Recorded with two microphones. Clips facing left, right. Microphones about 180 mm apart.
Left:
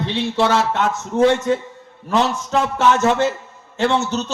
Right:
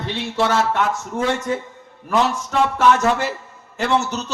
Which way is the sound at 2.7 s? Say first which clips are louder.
Left 1 dB; 25° left (ahead or behind).